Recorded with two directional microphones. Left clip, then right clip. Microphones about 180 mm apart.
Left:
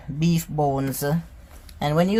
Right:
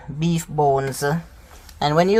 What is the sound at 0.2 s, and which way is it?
Speech, 15° right (ahead or behind).